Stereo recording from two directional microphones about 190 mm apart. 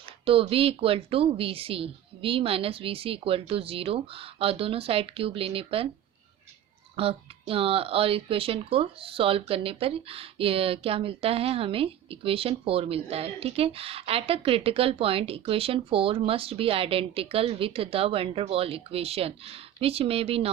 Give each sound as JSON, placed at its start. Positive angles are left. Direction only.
{"t": 0.0, "sound": "speech", "side_deg": -30}
{"t": 6.9, "sound": "speech", "side_deg": -30}